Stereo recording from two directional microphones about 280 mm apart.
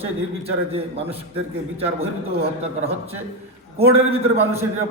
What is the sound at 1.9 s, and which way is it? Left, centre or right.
A man's voice, right.